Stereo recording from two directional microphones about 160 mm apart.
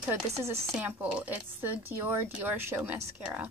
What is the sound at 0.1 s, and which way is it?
A woman's voice, 5° right (ahead or behind).